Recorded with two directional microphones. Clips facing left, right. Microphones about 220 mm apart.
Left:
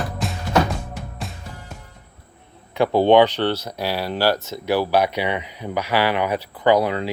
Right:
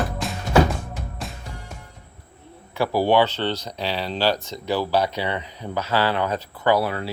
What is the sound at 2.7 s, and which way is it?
Speech, 20° left (ahead or behind).